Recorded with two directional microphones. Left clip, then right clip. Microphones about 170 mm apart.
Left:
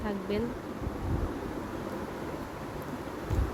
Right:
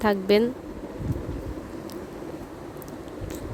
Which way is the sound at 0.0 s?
85° right.